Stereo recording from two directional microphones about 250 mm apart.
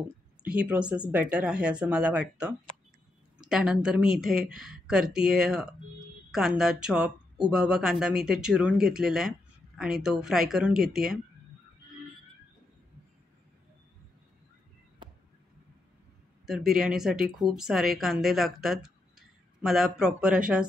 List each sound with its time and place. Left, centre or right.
0.4 s speech: centre
15.0 s a sound: centre
16.4 s speech: centre